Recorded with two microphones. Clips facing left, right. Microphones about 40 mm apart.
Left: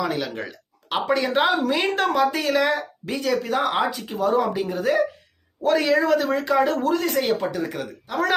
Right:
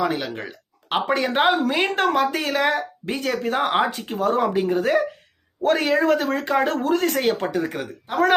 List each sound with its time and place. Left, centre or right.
0.1 s speech: centre
0.4 s a sound: right
1.1 s speech: right
7.6 s speech: right